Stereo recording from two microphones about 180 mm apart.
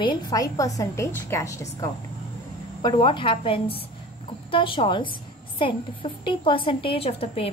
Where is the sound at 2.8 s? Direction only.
25° left (ahead or behind).